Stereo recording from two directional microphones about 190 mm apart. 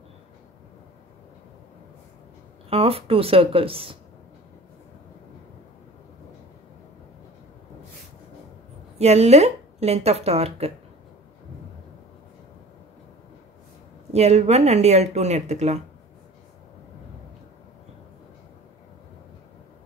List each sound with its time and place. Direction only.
2.7 s speech: 30° right (ahead or behind)
8.9 s speech: 35° right (ahead or behind)
14.1 s speech: 35° right (ahead or behind)